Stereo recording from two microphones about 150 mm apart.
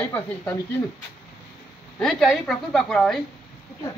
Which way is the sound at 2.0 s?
Centre (ahead or behind).